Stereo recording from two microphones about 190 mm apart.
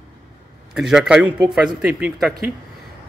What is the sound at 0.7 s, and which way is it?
A man's voice, 5° right (ahead or behind).